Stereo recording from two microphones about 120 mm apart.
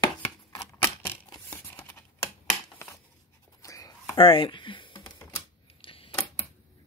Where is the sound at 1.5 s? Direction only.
15° left (ahead or behind).